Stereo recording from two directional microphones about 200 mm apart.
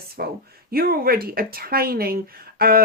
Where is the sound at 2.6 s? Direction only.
50° right (ahead or behind).